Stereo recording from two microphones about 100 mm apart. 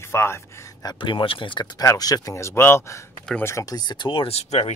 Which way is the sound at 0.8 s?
55° left (ahead or behind).